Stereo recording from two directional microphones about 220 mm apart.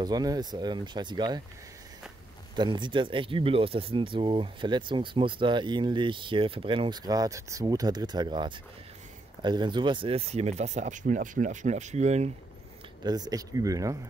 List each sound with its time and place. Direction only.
0.0 s speech: 15° right (ahead or behind)
2.5 s speech: 20° right (ahead or behind)
13.0 s speech: 20° right (ahead or behind)